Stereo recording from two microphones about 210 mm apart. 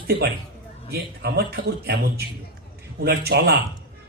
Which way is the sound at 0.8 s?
50° right (ahead or behind).